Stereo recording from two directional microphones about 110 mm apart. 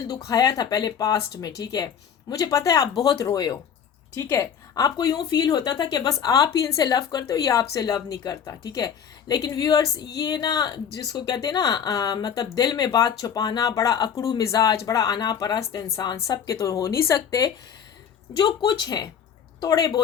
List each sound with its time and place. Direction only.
0.1 s speech: 35° left (ahead or behind)